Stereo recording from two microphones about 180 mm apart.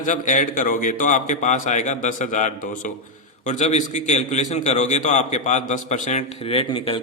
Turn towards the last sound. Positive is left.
turn(degrees=30)  # may be behind; listen again after turning